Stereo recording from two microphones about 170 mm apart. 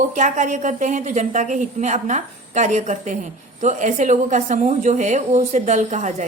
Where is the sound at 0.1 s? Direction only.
45° right (ahead or behind).